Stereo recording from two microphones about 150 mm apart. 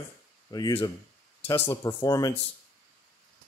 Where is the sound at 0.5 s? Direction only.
25° left (ahead or behind).